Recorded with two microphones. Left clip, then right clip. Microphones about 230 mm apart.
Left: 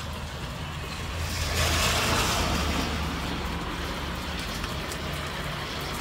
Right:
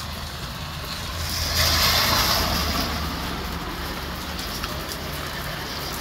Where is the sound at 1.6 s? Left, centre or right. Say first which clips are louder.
Right 6 dB; right.